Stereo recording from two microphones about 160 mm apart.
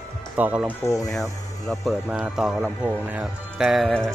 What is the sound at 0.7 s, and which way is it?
Speech, 15° left (ahead or behind).